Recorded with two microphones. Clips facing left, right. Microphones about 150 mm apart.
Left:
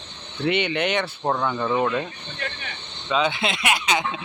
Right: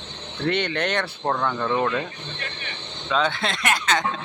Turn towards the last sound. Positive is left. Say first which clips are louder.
# even
turn(degrees=10)  # may be behind; listen again after turning